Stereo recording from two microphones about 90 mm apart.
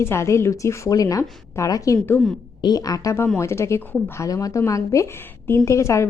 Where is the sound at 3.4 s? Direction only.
30° left (ahead or behind).